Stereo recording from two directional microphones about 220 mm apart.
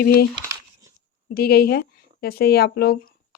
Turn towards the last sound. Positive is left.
turn(degrees=45)  # may be behind; listen again after turning